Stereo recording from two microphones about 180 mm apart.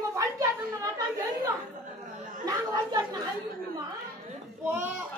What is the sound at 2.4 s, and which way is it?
Chatter, 20° right (ahead or behind).